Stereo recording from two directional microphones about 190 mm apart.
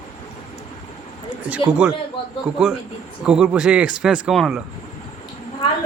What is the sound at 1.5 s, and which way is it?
Speech, 5° right (ahead or behind).